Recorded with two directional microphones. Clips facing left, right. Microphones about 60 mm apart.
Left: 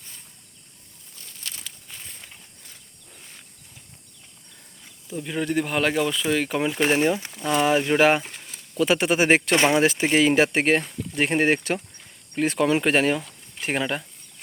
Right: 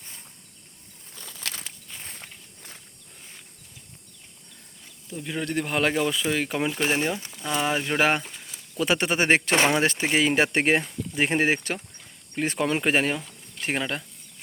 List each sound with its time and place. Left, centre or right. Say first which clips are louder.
1.1 s a sound: right 4 dB; right
2.0 s walk: right 2 dB; right
5.0 s speech: left 4 dB; centre
6.7 s speech: left 8 dB; centre